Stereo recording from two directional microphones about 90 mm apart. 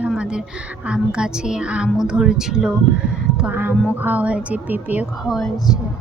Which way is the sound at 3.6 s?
20° right (ahead or behind).